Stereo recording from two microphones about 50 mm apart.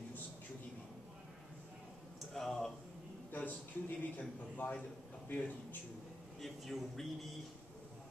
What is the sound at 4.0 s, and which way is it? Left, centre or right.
Speech, left.